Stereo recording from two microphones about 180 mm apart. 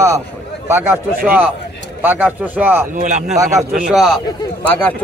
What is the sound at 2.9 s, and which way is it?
Speech, 45° right (ahead or behind).